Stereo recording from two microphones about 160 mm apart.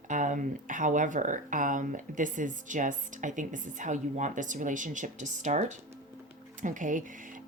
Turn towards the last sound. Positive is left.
turn(degrees=-55)  # may be behind; listen again after turning